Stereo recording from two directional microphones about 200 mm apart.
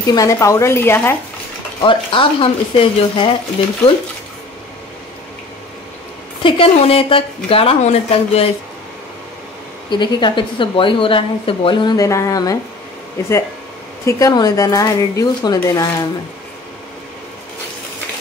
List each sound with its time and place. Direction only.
0.1 s speech: 15° left (ahead or behind)
1.8 s a woman's voice: 25° left (ahead or behind)
6.4 s a woman's voice: 25° left (ahead or behind)
9.8 s a woman's voice: 25° left (ahead or behind)
14.0 s speech: 20° left (ahead or behind)